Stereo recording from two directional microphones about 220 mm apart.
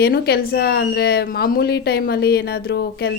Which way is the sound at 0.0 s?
45° left (ahead or behind).